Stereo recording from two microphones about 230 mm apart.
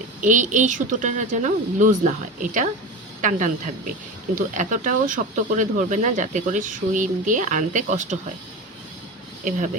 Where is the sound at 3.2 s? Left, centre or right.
Right.